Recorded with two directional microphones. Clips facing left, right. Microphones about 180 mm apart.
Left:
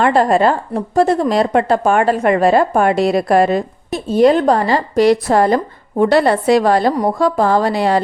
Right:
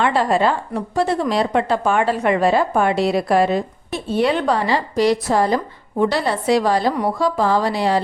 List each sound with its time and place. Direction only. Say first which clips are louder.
0.0 s a woman's voice: left 5 dB; 45° left (ahead or behind)